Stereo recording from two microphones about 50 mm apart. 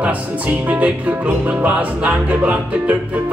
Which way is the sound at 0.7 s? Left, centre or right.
Right.